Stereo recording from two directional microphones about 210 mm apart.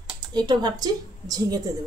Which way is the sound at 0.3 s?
20° right (ahead or behind).